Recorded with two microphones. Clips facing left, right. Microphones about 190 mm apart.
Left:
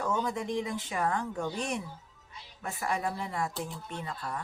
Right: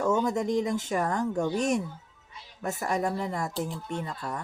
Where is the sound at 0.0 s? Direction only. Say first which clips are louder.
Right 6 dB; 45° right (ahead or behind).